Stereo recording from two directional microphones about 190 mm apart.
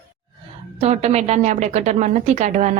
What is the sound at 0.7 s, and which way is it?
A woman's voice, 35° right (ahead or behind).